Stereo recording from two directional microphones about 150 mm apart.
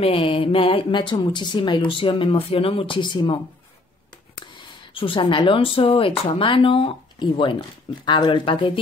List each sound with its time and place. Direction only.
0.0 s speech: 40° left (ahead or behind)
4.6 s speech: 35° left (ahead or behind)